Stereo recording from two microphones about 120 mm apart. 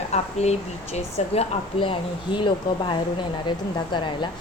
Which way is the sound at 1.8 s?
45° left (ahead or behind).